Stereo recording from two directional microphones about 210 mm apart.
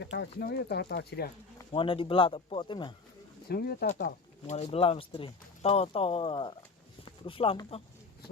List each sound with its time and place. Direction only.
0.0 s speech: 55° left (ahead or behind)
1.5 s speech: 25° left (ahead or behind)
3.5 s speech: 50° left (ahead or behind); by 7.8 s 25° left (ahead or behind)